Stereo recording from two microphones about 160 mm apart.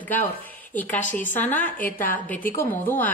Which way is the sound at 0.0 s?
10° left (ahead or behind).